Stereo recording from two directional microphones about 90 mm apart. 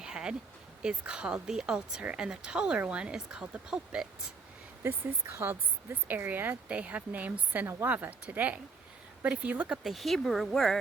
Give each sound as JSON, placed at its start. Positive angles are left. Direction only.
{"t": 0.0, "sound": "a sound", "side_deg": -10}
{"t": 0.8, "sound": "a woman's voice", "side_deg": -10}
{"t": 4.8, "sound": "a woman's voice", "side_deg": -25}
{"t": 9.8, "sound": "speech", "side_deg": 0}